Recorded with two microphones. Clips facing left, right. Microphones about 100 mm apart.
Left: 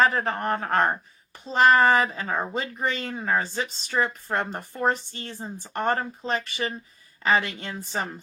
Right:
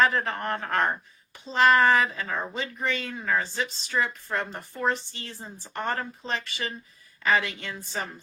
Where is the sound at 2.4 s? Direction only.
45° left (ahead or behind).